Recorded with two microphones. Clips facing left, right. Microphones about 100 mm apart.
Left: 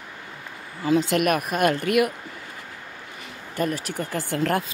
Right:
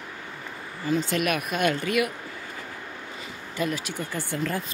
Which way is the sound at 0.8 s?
90° left.